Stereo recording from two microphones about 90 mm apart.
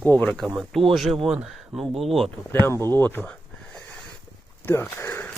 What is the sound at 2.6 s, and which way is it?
Speech, 30° left (ahead or behind).